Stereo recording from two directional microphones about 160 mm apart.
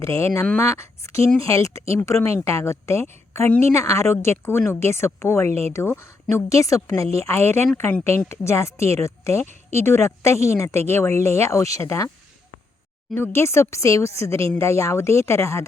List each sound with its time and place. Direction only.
0.0 s speech: 20° left (ahead or behind)
5.5 s speech: 40° right (ahead or behind)
5.7 s speech: 15° left (ahead or behind)
13.1 s speech: 15° left (ahead or behind)